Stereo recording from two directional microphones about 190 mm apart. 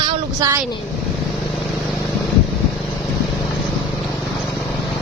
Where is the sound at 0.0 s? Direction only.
15° right (ahead or behind).